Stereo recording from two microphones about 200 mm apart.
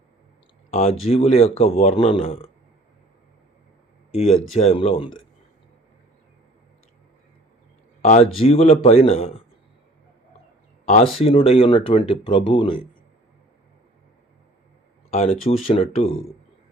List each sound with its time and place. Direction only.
0.7 s speech: 30° left (ahead or behind)
4.1 s speech: 30° left (ahead or behind)
8.0 s speech: 35° left (ahead or behind)
11.2 s speech: 30° left (ahead or behind)
15.1 s speech: 30° left (ahead or behind)